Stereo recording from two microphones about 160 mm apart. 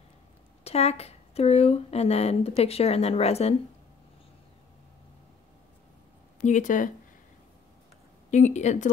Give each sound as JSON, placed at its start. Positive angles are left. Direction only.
{"t": 0.7, "sound": "speech", "side_deg": 40}
{"t": 6.4, "sound": "speech", "side_deg": 50}
{"t": 8.3, "sound": "speech", "side_deg": 50}